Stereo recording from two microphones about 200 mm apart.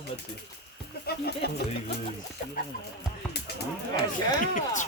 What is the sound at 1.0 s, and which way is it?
Speech, 55° left (ahead or behind).